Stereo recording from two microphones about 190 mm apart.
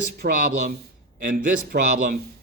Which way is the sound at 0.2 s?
55° right (ahead or behind).